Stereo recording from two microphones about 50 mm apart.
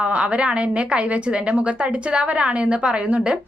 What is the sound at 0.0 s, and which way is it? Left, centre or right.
A woman's voice, right.